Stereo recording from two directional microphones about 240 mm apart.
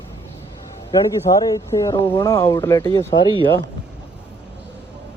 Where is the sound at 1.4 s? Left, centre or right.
Centre.